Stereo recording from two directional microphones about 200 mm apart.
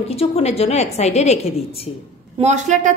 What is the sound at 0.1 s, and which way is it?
A woman's voice, 30° left (ahead or behind).